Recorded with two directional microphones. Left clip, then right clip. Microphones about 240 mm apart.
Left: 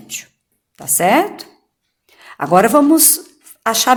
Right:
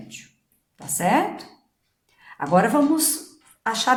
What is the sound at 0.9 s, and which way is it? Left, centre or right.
A woman's voice, left.